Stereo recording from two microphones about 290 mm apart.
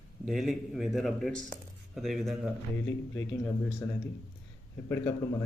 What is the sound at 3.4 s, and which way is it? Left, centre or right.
A man's voice, centre.